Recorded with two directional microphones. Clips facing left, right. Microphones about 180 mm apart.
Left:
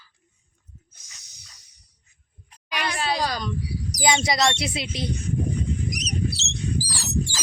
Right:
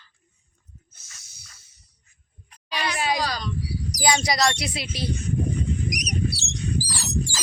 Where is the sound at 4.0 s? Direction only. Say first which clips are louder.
Even; 25° left (ahead or behind).